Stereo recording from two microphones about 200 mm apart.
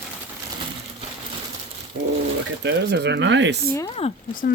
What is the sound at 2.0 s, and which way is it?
Bird, 70° right (ahead or behind).